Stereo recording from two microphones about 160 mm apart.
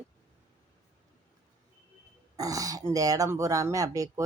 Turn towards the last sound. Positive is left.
turn(degrees=-20)  # may be behind; listen again after turning